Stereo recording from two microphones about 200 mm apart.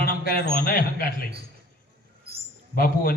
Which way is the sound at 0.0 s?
45° left (ahead or behind).